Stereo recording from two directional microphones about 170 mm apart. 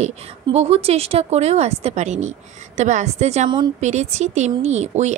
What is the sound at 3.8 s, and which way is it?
Speech, 40° right (ahead or behind).